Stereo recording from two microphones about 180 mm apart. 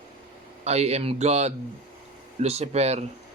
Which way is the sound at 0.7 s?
35° right (ahead or behind).